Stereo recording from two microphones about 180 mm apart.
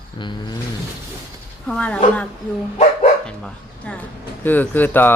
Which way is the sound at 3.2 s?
5° left (ahead or behind).